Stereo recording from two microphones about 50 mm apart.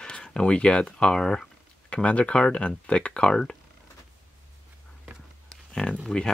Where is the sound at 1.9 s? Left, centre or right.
Left.